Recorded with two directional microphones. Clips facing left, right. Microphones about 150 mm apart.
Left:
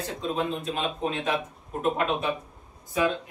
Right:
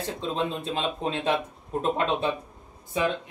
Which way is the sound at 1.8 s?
30° right (ahead or behind).